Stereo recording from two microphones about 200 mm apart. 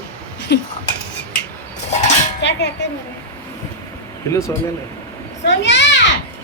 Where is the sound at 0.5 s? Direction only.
55° left (ahead or behind).